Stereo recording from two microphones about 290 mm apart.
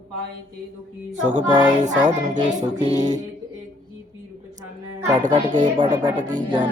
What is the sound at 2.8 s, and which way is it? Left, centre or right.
Child singing, centre.